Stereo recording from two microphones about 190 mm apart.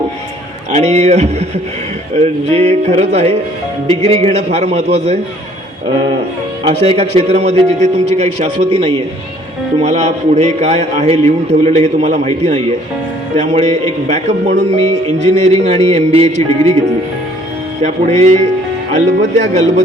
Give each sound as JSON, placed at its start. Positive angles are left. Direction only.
{"t": 0.7, "sound": "speech", "side_deg": -35}
{"t": 2.5, "sound": "speech", "side_deg": -35}
{"t": 6.7, "sound": "speech", "side_deg": -30}
{"t": 17.8, "sound": "speech", "side_deg": -35}